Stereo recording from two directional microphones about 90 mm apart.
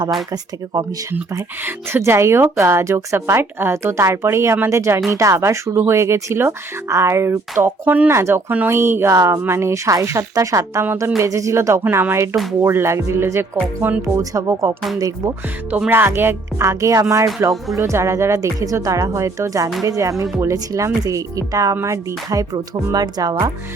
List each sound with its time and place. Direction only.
1.6 s speech: 30° right (ahead or behind)
14.2 s speech: 35° right (ahead or behind)
15.9 s speech: 25° right (ahead or behind); by 23.5 s 45° right (ahead or behind)